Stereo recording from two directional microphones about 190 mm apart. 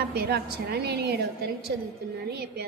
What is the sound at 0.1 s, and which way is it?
A woman's voice, 60° right (ahead or behind).